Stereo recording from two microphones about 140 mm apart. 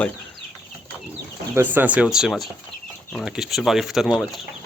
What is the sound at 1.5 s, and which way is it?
Speech, 15° right (ahead or behind).